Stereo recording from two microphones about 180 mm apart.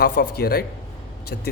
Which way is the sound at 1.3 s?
70° left (ahead or behind).